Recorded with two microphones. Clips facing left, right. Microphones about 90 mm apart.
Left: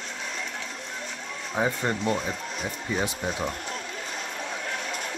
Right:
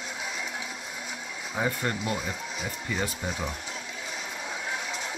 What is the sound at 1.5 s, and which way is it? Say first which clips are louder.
Speech: left 3 dB; 15° left (ahead or behind).